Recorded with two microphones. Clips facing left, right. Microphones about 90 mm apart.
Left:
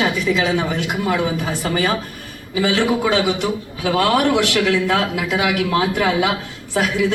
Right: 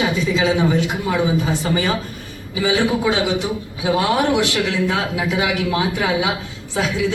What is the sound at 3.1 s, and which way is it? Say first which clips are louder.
Speech: left 1 dB; 55° left (ahead or behind).